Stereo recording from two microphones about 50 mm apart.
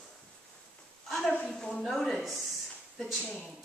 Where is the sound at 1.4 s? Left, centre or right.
Centre.